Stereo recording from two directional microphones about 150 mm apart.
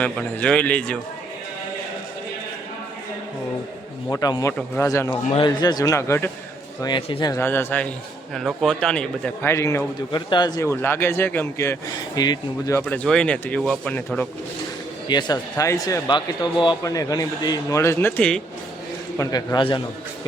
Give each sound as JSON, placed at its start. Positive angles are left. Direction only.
{"t": 0.0, "sound": "speech", "side_deg": 5}
{"t": 4.1, "sound": "speech", "side_deg": 25}
{"t": 6.8, "sound": "speech", "side_deg": 30}
{"t": 7.3, "sound": "a man's voice", "side_deg": 15}
{"t": 9.5, "sound": "speech", "side_deg": 20}
{"t": 10.1, "sound": "speech", "side_deg": 30}
{"t": 12.9, "sound": "speech", "side_deg": 5}
{"t": 15.0, "sound": "speech", "side_deg": 25}
{"t": 18.2, "sound": "a man's voice", "side_deg": 5}
{"t": 19.1, "sound": "speech", "side_deg": 20}